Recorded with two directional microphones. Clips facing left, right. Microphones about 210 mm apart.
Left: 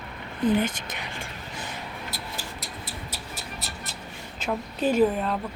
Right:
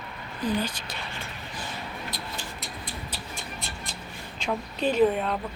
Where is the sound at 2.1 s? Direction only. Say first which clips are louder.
Even; 5° left (ahead or behind).